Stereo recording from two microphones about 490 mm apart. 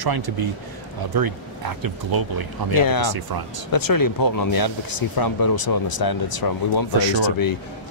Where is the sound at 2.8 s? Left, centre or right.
Left.